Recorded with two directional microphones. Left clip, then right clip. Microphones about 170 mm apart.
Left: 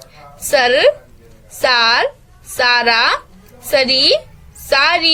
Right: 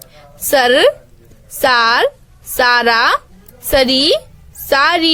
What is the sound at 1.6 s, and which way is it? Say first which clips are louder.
Speech: right 1 dB; 55° right (ahead or behind).